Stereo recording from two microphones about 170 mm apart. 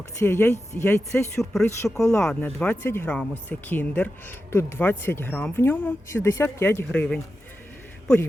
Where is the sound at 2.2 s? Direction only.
5° left (ahead or behind).